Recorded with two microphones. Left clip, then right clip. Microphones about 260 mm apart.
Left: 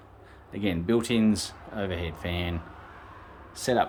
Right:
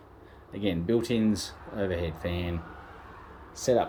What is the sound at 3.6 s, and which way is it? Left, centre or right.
Speech, centre.